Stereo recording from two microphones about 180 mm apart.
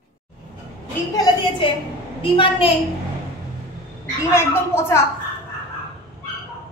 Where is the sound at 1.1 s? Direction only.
20° left (ahead or behind).